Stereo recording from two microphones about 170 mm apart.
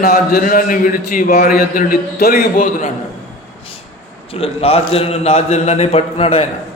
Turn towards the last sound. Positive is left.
turn(degrees=35)  # may be behind; listen again after turning